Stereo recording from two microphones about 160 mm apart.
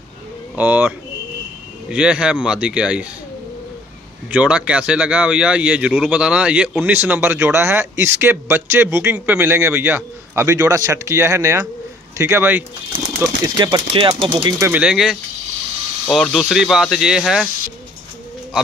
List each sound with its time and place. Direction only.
0.6 s speech: 10° right (ahead or behind)
4.3 s speech: 10° right (ahead or behind)
13.2 s speech: 25° right (ahead or behind)
14.6 s speech: 10° right (ahead or behind)